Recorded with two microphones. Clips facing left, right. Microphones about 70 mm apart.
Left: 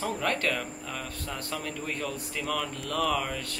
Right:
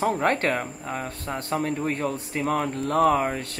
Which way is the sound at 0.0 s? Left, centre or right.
Right.